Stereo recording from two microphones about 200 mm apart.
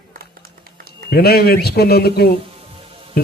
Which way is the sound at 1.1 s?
50° left (ahead or behind).